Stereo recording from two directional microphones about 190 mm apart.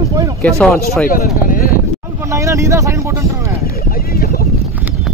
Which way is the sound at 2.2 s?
15° right (ahead or behind).